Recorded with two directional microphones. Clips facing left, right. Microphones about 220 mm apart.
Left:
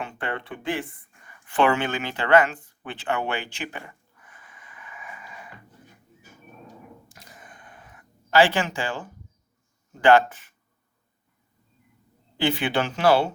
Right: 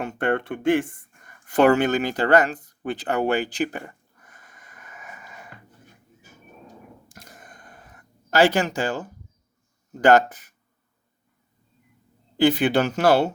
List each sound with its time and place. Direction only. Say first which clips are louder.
0.0 s speech: right 8 dB; 45° right (ahead or behind)
7.1 s a sound: right 2 dB; 45° right (ahead or behind)
9.9 s speech: right 1 dB; 40° right (ahead or behind)
12.4 s speech: right 6 dB; 40° right (ahead or behind)